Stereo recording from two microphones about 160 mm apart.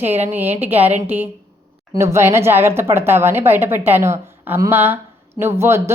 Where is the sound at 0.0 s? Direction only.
10° right (ahead or behind).